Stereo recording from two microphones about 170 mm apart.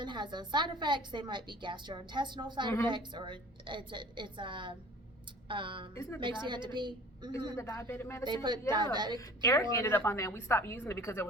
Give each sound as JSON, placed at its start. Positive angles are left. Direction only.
{"t": 0.0, "sound": "a woman's voice", "side_deg": -25}
{"t": 5.9, "sound": "a woman's voice", "side_deg": 15}
{"t": 6.1, "sound": "a woman's voice", "side_deg": -30}
{"t": 7.5, "sound": "a woman's voice", "side_deg": 15}
{"t": 8.2, "sound": "a woman's voice", "side_deg": -25}
{"t": 9.1, "sound": "a woman's voice", "side_deg": 20}